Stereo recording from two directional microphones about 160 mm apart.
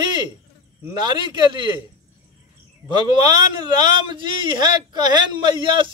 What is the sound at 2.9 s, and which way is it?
A man's voice, 25° right (ahead or behind).